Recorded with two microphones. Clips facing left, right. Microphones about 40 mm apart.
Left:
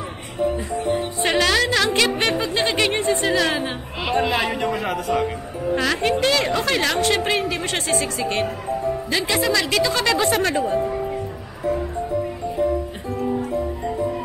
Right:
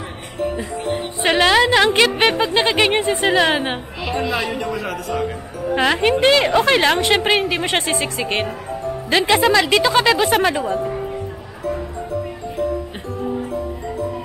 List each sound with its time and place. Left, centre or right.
1.2 s a woman's voice: right
4.2 s a man's voice: centre
5.8 s a woman's voice: right
10.4 s a woman's voice: centre